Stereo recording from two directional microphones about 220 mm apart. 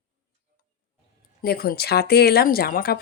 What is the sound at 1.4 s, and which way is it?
Speech, 45° left (ahead or behind).